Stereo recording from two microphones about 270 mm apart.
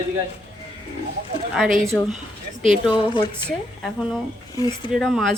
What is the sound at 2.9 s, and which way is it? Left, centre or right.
Speech, centre.